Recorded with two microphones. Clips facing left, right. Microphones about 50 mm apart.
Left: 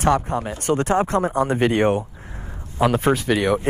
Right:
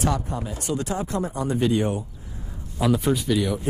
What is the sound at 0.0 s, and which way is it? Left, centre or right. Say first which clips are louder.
A man's voice: left 6 dB; left.